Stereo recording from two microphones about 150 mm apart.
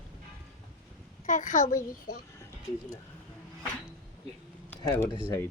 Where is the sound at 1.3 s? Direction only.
60° left (ahead or behind).